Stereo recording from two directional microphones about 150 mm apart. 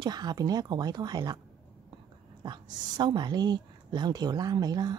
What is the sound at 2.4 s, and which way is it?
A woman's voice, 30° right (ahead or behind).